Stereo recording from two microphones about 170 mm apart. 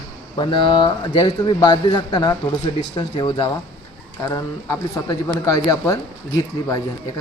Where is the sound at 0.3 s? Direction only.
30° left (ahead or behind).